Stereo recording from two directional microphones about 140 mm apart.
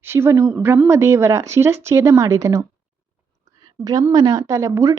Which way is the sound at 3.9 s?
25° right (ahead or behind).